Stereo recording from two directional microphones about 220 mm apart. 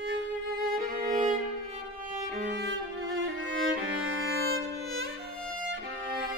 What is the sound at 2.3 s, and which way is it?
Music, 45° right (ahead or behind).